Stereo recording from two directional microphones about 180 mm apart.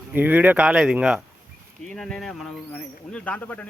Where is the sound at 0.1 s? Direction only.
10° right (ahead or behind).